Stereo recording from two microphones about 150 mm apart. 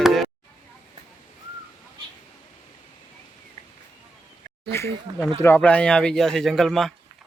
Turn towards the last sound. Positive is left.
turn(degrees=0)  # may be behind; listen again after turning